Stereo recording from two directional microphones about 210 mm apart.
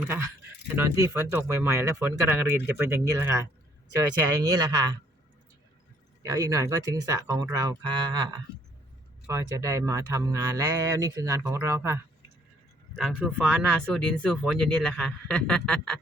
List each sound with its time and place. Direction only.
0.0 s speech: 10° right (ahead or behind)
4.4 s speech: 20° right (ahead or behind)
6.2 s speech: 15° right (ahead or behind)
13.0 s speech: centre (ahead or behind)